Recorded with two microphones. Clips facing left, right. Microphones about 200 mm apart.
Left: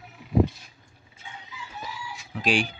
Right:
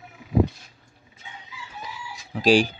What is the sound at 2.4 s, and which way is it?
Speech, 35° right (ahead or behind).